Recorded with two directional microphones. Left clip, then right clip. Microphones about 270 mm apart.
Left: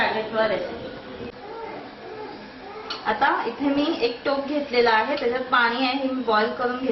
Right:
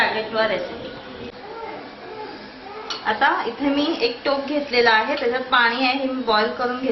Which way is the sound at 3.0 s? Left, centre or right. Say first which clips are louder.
Right 2 dB; centre.